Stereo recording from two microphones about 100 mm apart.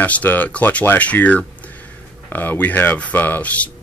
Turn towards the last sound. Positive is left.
turn(degrees=15)  # may be behind; listen again after turning